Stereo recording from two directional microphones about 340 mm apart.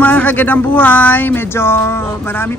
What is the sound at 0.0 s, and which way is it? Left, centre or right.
Speech, centre.